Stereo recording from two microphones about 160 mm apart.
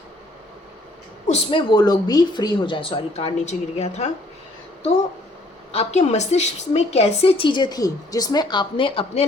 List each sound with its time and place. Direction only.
1.3 s a woman's voice: 30° left (ahead or behind)
5.7 s a woman's voice: 45° left (ahead or behind)